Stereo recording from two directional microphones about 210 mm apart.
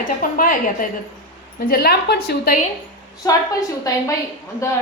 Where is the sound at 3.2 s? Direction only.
15° left (ahead or behind).